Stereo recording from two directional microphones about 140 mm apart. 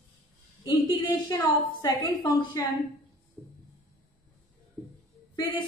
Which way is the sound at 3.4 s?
15° right (ahead or behind).